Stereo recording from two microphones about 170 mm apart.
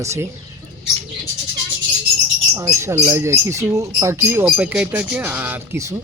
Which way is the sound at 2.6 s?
20° right (ahead or behind).